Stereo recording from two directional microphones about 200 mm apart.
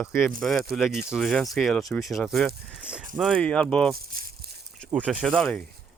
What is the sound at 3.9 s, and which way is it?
Speech, 50° right (ahead or behind).